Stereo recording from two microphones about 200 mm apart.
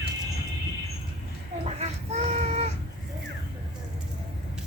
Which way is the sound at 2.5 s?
35° right (ahead or behind).